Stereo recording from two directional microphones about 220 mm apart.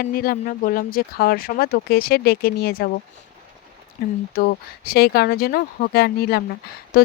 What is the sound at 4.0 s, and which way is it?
Speech, 45° left (ahead or behind).